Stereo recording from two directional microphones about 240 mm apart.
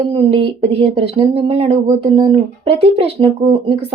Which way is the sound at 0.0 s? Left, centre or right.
Right.